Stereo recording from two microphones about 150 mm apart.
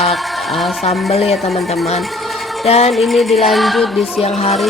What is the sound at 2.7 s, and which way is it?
Speech, 45° left (ahead or behind).